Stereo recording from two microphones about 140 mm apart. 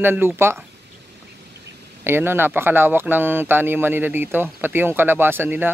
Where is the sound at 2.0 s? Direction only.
15° right (ahead or behind).